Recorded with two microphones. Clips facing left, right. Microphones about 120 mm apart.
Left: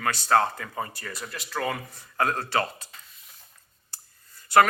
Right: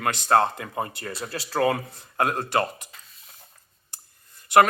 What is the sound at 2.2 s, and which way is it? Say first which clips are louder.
Speech: right 2 dB; 15° right (ahead or behind).